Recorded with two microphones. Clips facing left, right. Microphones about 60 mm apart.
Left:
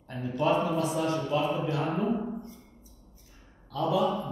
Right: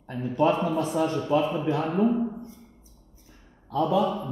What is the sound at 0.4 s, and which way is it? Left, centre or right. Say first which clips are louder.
Speech: right 2 dB; right.